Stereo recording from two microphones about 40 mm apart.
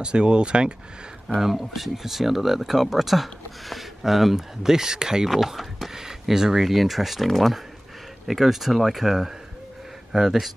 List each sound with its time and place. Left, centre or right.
0.0 s speech: right
1.4 s speech: centre
5.3 s speech: centre
8.3 s speech: centre